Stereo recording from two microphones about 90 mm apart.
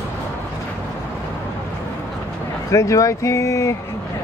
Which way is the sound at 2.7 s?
35° left (ahead or behind).